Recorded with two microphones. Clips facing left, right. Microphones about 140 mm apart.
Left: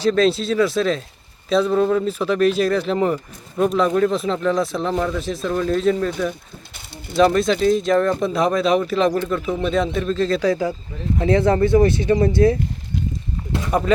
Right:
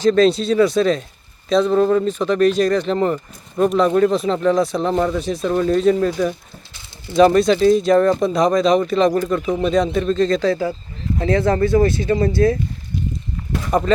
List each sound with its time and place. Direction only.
0.0 s speech: centre (ahead or behind)
4.9 s speech: 20° right (ahead or behind)
5.2 s speech: centre (ahead or behind)
5.5 s speech: 10° right (ahead or behind); by 12.5 s 20° left (ahead or behind)
13.7 s speech: 5° left (ahead or behind)